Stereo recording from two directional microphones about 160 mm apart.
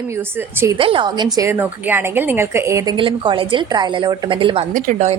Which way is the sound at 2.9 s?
30° right (ahead or behind).